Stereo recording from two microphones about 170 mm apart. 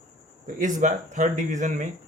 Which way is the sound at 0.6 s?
45° right (ahead or behind).